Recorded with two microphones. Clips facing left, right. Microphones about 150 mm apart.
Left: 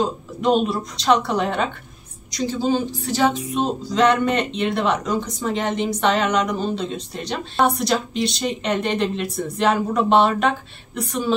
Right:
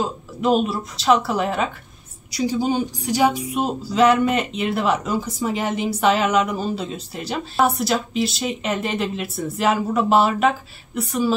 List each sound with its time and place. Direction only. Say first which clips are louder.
0.0 s music: left 1 dB; 5° right (ahead or behind)